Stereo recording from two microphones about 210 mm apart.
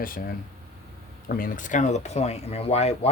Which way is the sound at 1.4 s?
40° left (ahead or behind).